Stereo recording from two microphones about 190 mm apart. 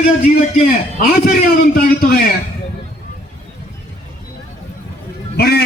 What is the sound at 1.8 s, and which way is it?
Speech, 50° left (ahead or behind).